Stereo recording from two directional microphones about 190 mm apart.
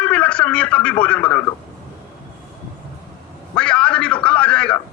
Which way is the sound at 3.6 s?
5° left (ahead or behind).